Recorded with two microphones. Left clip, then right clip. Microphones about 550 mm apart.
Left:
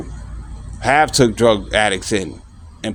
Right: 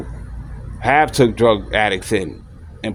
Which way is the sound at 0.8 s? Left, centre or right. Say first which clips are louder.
Even; right.